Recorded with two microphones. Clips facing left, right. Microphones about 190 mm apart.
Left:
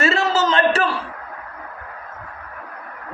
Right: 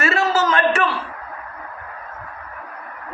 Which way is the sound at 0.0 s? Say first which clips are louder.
Even; 25° left (ahead or behind).